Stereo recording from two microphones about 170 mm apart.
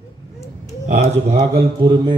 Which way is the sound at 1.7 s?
25° right (ahead or behind).